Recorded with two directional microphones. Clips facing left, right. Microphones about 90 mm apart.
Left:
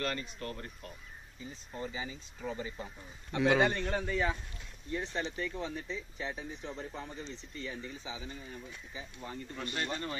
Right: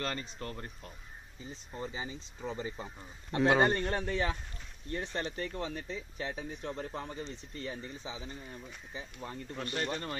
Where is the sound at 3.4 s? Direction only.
45° right (ahead or behind).